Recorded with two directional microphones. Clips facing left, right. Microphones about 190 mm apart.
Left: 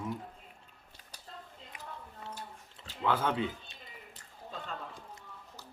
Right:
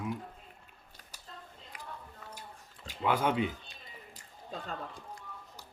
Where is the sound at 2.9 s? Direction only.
15° right (ahead or behind).